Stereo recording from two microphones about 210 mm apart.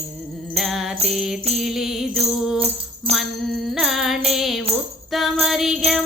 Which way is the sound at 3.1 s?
30° right (ahead or behind).